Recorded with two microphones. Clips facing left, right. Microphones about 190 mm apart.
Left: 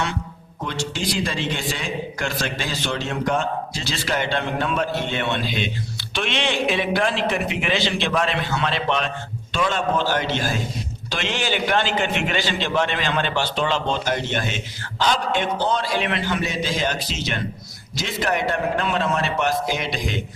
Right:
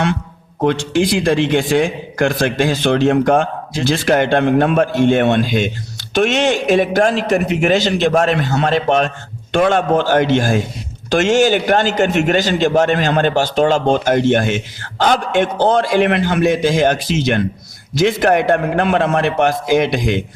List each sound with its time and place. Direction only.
0.6 s a man's voice: 60° right (ahead or behind)